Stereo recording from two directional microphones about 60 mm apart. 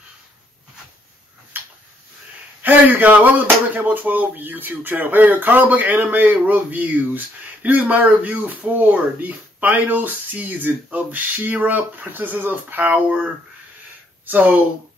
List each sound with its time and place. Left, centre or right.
1.5 s tick-tock: right
2.6 s speech: right